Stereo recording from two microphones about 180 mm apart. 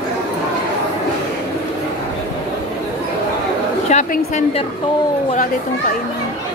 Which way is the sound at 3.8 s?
40° left (ahead or behind).